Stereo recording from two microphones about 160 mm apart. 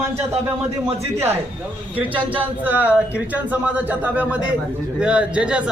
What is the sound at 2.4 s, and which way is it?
A man's voice, 10° right (ahead or behind).